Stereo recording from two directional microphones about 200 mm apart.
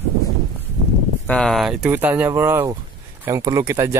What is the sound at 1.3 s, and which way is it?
Speech, centre (ahead or behind).